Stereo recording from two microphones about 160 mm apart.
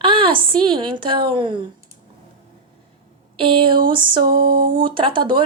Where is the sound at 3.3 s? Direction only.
35° right (ahead or behind).